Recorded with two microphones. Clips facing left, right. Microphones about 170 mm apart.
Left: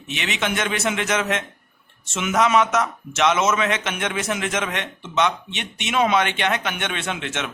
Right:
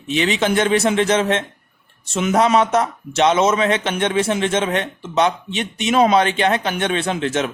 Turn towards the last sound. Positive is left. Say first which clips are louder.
# right 8 dB
turn(degrees=-35)  # may be behind; listen again after turning